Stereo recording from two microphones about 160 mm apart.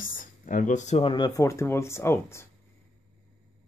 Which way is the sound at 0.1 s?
55° left (ahead or behind).